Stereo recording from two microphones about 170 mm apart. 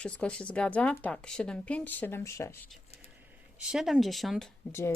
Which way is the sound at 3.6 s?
Centre (ahead or behind).